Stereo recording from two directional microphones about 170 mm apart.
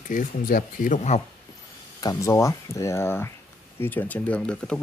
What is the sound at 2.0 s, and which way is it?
Speech, 20° left (ahead or behind).